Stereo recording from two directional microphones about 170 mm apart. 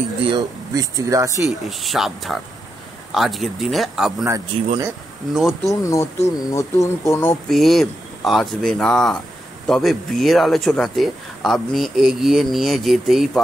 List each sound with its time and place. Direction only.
0.2 s speech: 25° right (ahead or behind)
1.4 s speech: centre (ahead or behind)
4.5 s speech: 30° right (ahead or behind)
5.3 s speech: centre (ahead or behind)
5.8 s speech: 20° left (ahead or behind)
7.4 s speech: centre (ahead or behind)